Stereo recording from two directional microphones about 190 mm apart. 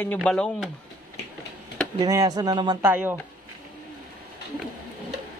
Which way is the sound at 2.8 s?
10° right (ahead or behind).